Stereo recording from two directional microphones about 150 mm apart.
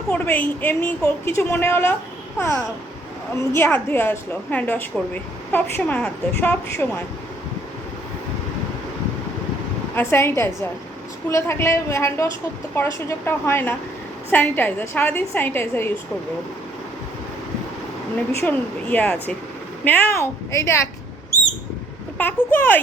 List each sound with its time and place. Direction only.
0.1 s a woman's voice: 10° left (ahead or behind)
3.5 s a woman's voice: 15° left (ahead or behind)
9.9 s a woman's voice: 15° left (ahead or behind)
18.3 s a woman's voice: 15° left (ahead or behind)
22.2 s a woman's voice: 15° left (ahead or behind)